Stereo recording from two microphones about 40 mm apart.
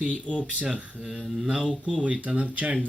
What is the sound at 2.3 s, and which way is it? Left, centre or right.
Speech, right.